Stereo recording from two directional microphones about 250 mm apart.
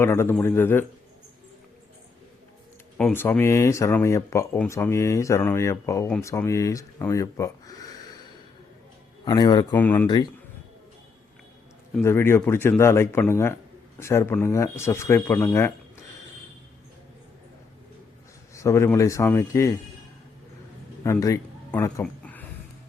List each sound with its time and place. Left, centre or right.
0.0 s speech: centre
3.0 s speech: centre
12.0 s speech: centre
18.5 s speech: centre
21.0 s speech: centre
22.0 s a sound: centre